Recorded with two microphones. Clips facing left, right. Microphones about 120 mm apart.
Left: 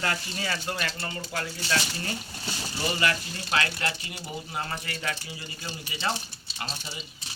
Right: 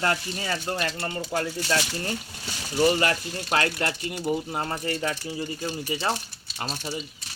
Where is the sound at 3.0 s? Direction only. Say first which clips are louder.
Right 3 dB; 45° right (ahead or behind).